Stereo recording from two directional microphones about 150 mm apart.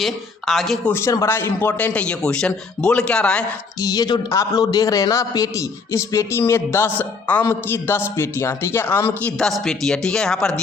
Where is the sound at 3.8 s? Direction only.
25° left (ahead or behind).